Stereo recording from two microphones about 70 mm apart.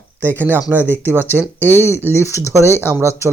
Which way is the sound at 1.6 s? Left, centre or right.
Left.